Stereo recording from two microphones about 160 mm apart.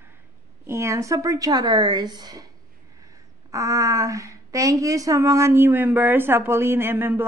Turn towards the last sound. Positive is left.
turn(degrees=-15)  # may be behind; listen again after turning